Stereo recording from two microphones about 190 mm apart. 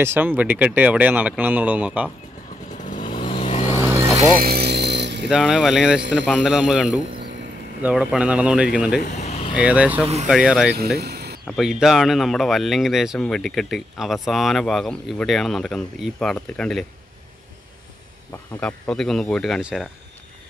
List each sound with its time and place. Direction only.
0.0 s speech: 10° right (ahead or behind)
2.8 s vehicle: 40° left (ahead or behind)
3.1 s vehicle: 25° left (ahead or behind)
3.9 s vehicle: 15° right (ahead or behind)
4.4 s music: 55° right (ahead or behind)
5.3 s speech: centre (ahead or behind)
9.2 s vehicle: 35° left (ahead or behind)
9.6 s speech: 5° right (ahead or behind)
11.0 s a sound: 55° right (ahead or behind)
11.4 s speech: centre (ahead or behind)
18.6 s speech: 5° left (ahead or behind)